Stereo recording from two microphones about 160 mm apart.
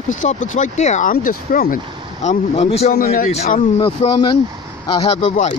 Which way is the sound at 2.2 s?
45° left (ahead or behind).